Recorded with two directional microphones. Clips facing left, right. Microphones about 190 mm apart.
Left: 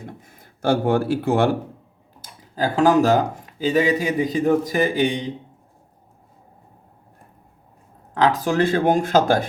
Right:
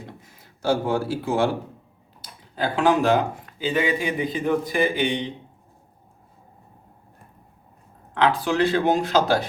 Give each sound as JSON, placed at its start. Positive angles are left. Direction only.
{"t": 0.0, "sound": "speech", "side_deg": 55}
{"t": 2.6, "sound": "speech", "side_deg": 40}
{"t": 8.1, "sound": "speech", "side_deg": 40}